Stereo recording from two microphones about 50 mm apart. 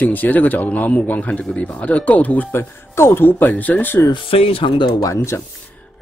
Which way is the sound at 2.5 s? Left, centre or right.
Left.